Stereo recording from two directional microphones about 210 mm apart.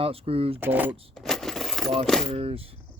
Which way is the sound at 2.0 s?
Centre (ahead or behind).